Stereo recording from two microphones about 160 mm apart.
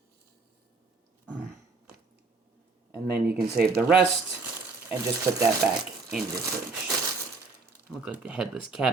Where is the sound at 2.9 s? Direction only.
80° right.